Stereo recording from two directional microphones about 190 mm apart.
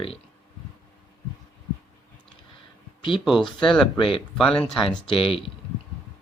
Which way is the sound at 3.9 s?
25° left (ahead or behind).